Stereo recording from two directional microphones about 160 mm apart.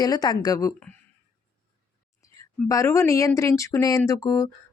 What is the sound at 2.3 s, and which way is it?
Speech, 20° left (ahead or behind).